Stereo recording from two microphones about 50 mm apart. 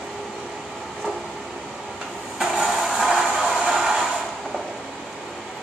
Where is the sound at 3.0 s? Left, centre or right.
Centre.